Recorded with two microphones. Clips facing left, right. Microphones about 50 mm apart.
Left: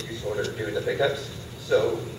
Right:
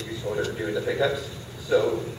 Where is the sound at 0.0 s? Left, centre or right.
Centre.